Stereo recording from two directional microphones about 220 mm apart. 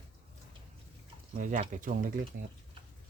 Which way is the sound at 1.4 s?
35° right (ahead or behind).